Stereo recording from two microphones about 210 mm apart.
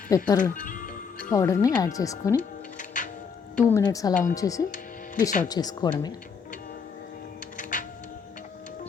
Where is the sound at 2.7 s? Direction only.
40° left (ahead or behind).